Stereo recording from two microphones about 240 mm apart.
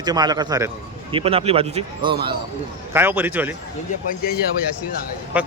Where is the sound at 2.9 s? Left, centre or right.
Centre.